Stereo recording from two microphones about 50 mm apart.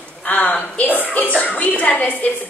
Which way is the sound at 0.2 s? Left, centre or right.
Left.